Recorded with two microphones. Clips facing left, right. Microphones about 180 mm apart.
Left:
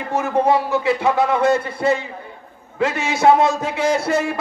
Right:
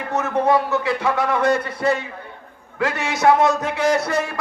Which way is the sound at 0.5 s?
20° left (ahead or behind).